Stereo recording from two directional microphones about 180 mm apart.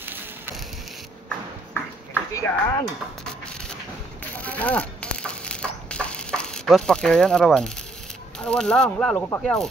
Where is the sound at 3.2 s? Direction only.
5° left (ahead or behind).